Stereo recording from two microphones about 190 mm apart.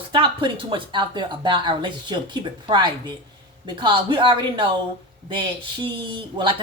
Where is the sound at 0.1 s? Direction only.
25° right (ahead or behind).